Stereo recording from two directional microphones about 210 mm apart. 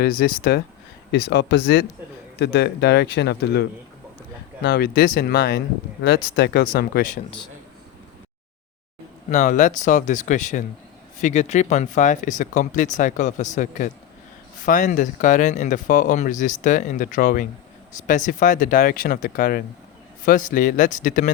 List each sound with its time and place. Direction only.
0.0 s speech: 45° left (ahead or behind)
9.3 s speech: 35° left (ahead or behind)